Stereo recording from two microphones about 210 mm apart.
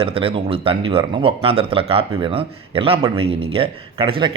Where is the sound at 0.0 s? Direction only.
25° right (ahead or behind).